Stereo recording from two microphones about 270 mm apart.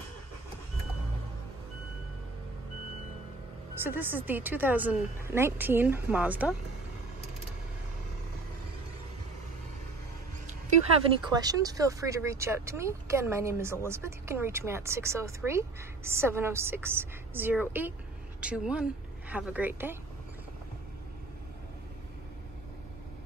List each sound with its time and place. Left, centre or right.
3.8 s speech: centre
11.2 s speech: centre